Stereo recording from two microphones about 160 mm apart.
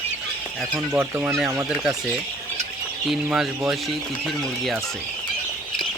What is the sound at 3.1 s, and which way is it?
Speech, 5° right (ahead or behind).